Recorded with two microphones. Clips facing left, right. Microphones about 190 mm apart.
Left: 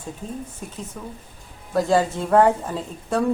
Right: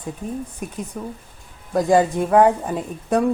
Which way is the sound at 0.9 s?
10° right (ahead or behind).